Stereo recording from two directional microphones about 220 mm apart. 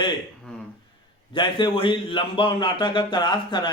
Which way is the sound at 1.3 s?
20° left (ahead or behind).